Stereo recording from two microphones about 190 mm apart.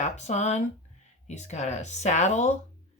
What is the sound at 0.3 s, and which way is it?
Speech, 35° left (ahead or behind).